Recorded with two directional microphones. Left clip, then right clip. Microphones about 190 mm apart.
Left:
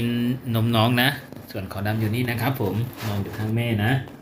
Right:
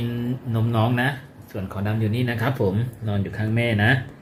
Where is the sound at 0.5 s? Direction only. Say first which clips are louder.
Left 2 dB; centre (ahead or behind).